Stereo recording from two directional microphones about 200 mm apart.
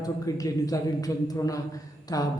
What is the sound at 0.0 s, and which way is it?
Speech, 15° left (ahead or behind).